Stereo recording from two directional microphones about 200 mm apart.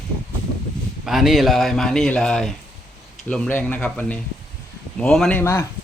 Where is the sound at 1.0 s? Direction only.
Centre (ahead or behind).